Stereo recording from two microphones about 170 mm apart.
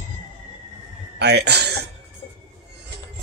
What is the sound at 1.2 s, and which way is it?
Speech, 75° right (ahead or behind).